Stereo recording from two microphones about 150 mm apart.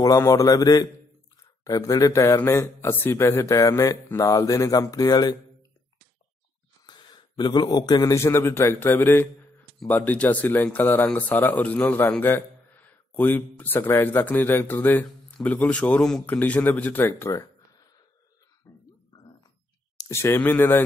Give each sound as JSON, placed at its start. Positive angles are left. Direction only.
{"t": 0.0, "sound": "speech", "side_deg": 20}
{"t": 6.9, "sound": "a man's voice", "side_deg": 30}
{"t": 17.3, "sound": "a sound", "side_deg": 25}
{"t": 20.0, "sound": "speech", "side_deg": 15}